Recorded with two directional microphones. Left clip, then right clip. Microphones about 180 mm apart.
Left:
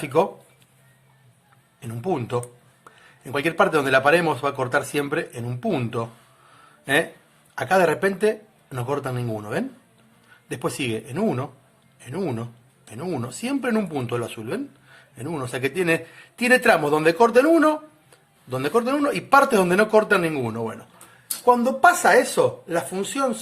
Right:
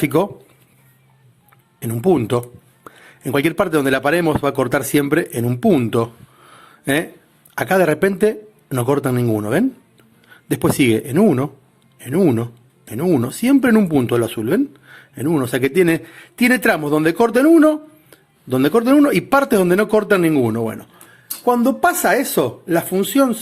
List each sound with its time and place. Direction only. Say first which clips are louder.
0.0 s speech: right 3 dB; 50° right (ahead or behind)
1.8 s speech: right 10 dB; 50° right (ahead or behind)
6.5 s a sound: right 2 dB; 50° right (ahead or behind)
7.5 s speech: right 3 dB; 50° right (ahead or behind)